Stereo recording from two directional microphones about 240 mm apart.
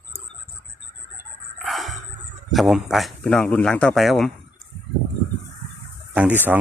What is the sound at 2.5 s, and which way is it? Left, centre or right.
Speech, centre.